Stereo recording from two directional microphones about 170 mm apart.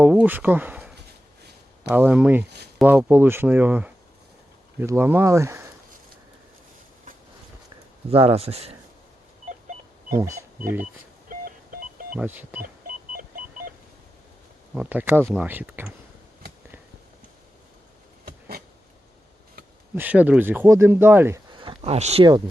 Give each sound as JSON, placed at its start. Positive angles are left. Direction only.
{"t": 0.0, "sound": "speech", "side_deg": -10}
{"t": 8.1, "sound": "speech", "side_deg": -35}
{"t": 9.5, "sound": "power windows", "side_deg": -50}
{"t": 10.2, "sound": "speech", "side_deg": -15}
{"t": 11.3, "sound": "beep", "side_deg": -55}
{"t": 12.1, "sound": "speech", "side_deg": -10}
{"t": 13.1, "sound": "beep", "side_deg": -55}
{"t": 14.8, "sound": "speech", "side_deg": -10}
{"t": 18.3, "sound": "a sound", "side_deg": -60}
{"t": 20.0, "sound": "speech", "side_deg": -10}
{"t": 21.5, "sound": "a sound", "side_deg": -30}